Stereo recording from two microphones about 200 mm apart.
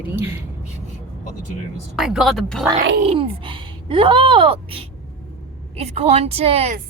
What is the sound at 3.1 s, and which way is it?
A woman's voice, 25° right (ahead or behind).